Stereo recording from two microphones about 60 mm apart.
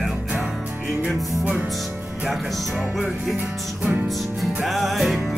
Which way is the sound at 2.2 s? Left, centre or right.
Centre.